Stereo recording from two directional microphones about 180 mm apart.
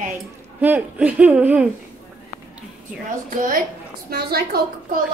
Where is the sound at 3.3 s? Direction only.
45° right (ahead or behind).